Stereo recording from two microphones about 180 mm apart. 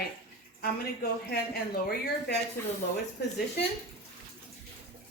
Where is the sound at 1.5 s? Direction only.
60° left (ahead or behind).